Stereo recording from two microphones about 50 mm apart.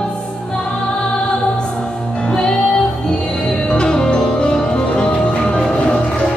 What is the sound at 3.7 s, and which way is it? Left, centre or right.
Music, centre.